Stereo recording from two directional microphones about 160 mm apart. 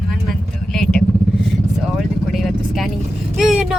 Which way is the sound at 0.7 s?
5° left (ahead or behind).